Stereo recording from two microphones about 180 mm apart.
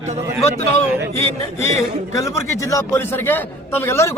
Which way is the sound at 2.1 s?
15° left (ahead or behind).